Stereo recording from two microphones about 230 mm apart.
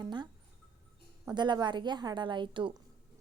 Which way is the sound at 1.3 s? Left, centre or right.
Centre.